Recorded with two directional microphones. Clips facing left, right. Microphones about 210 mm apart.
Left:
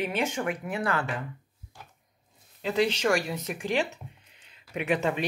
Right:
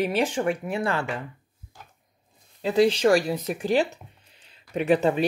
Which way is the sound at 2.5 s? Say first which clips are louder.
Right 6 dB; 35° right (ahead or behind).